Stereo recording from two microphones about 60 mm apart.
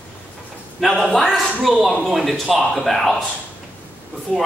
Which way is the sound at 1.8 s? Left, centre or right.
Centre.